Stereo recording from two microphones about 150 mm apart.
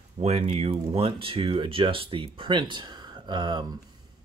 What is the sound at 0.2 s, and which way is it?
Speech, 40° right (ahead or behind).